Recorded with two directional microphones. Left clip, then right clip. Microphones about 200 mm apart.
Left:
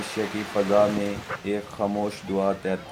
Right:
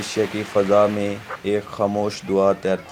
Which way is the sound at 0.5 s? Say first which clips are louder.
Right 4 dB; 40° right (ahead or behind).